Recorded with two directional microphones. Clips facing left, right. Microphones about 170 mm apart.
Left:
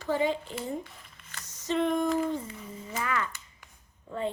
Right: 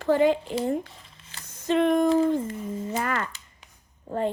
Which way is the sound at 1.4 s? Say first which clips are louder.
Right 6 dB; 55° right (ahead or behind).